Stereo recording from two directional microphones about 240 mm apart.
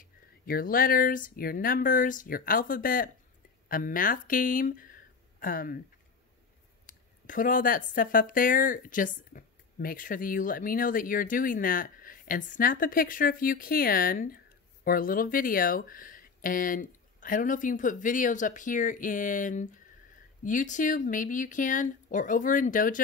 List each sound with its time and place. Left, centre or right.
0.0 s speech: left
6.9 s speech: left